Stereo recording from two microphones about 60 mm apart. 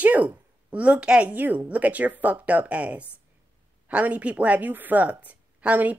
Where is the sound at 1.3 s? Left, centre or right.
Right.